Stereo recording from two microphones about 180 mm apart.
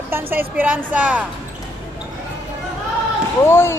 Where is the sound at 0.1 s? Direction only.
10° right (ahead or behind).